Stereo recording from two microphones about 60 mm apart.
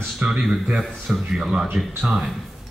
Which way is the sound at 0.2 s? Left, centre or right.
Centre.